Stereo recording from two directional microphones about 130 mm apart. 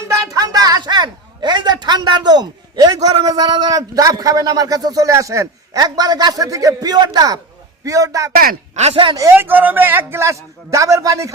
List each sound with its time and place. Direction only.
0.1 s a woman's voice: 25° right (ahead or behind)
8.4 s speech: 60° right (ahead or behind)
9.1 s a man's voice: 20° right (ahead or behind)